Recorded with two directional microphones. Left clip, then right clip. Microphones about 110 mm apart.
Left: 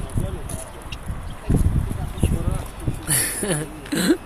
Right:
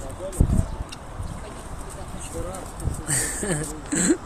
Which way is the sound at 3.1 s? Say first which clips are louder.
Left 2 dB; 5° left (ahead or behind).